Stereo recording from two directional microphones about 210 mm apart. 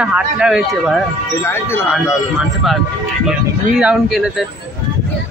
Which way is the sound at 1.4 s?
10° left (ahead or behind).